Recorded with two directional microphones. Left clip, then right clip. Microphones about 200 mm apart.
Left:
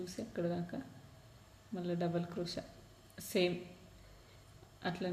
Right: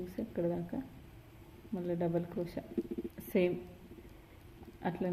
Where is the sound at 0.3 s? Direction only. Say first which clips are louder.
Right 3 dB; 30° right (ahead or behind).